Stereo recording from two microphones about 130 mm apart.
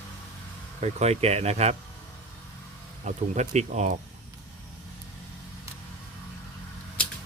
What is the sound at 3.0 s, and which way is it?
Speech, 60° right (ahead or behind).